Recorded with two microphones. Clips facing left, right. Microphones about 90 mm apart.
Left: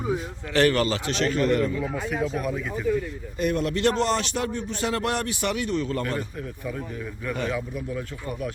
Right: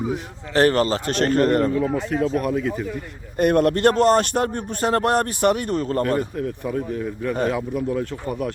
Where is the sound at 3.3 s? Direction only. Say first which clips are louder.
Right 8 dB; 55° right (ahead or behind).